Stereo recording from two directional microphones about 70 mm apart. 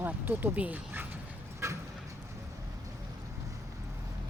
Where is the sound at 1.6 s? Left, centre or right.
Right.